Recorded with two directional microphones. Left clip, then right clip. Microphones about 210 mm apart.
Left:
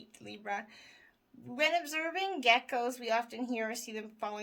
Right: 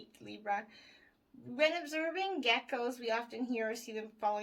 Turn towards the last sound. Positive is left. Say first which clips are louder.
# right 4 dB
turn(degrees=45)  # may be behind; listen again after turning